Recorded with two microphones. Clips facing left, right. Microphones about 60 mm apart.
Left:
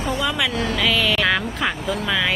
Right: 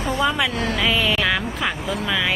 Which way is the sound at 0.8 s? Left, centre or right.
Centre.